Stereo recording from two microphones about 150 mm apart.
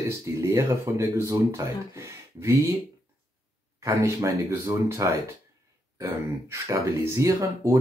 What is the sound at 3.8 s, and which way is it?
Speech, 20° right (ahead or behind).